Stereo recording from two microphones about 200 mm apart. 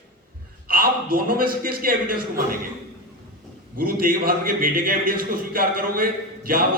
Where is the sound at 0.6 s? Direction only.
45° right (ahead or behind).